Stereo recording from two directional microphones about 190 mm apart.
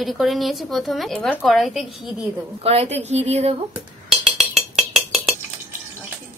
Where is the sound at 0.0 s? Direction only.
Centre (ahead or behind).